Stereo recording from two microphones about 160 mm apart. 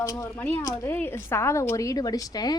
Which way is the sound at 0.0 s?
20° left (ahead or behind).